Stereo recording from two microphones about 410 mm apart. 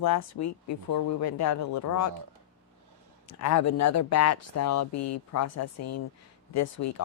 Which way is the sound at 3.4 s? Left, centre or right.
Left.